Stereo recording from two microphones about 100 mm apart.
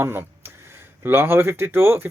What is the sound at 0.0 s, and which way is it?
Speech, 25° right (ahead or behind).